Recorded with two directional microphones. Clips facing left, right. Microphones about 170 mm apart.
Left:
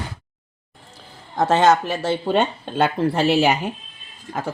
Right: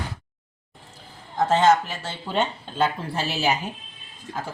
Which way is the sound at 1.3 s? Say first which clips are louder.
Left 2 dB; 70° left (ahead or behind).